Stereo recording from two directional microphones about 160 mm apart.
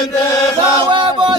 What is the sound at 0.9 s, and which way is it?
Chant, 30° right (ahead or behind).